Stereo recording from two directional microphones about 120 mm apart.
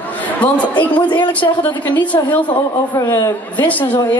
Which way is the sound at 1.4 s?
30° left (ahead or behind).